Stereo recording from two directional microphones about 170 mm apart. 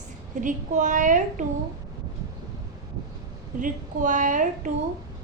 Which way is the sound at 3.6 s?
50° right (ahead or behind).